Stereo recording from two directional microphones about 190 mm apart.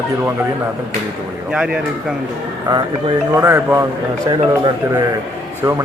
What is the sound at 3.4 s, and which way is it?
Speech, 15° right (ahead or behind).